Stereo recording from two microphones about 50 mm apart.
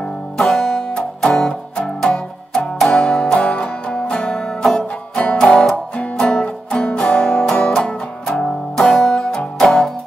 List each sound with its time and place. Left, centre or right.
0.5 s music: centre
9.6 s music: centre